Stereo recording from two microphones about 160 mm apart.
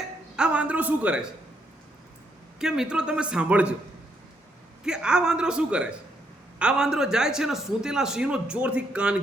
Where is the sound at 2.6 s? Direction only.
5° right (ahead or behind).